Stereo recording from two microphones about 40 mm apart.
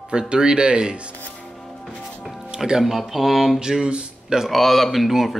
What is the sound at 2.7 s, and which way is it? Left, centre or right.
Speech, centre.